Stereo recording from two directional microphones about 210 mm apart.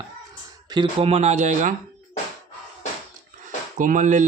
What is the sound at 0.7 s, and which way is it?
Speech, 20° right (ahead or behind).